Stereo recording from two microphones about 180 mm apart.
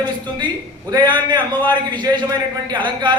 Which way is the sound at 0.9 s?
25° right (ahead or behind).